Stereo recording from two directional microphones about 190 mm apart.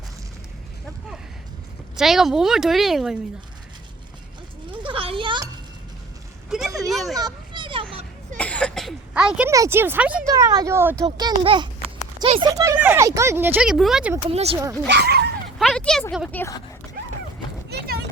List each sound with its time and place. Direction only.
2.0 s speech: centre (ahead or behind)
4.7 s children playing: 25° right (ahead or behind)
6.5 s vehicle: centre (ahead or behind)
6.9 s speech: centre (ahead or behind)
7.2 s children playing: 20° right (ahead or behind)
8.4 s throat clearing: 5° left (ahead or behind)
9.5 s speech: 15° right (ahead or behind)
10.2 s speech: 20° right (ahead or behind); by 14.1 s centre (ahead or behind)
14.3 s speech: 30° right (ahead or behind)
14.8 s speech: 60° right (ahead or behind)
15.5 s a sound: centre (ahead or behind)
16.4 s speech: 15° left (ahead or behind)
17.7 s a sound: 55° right (ahead or behind)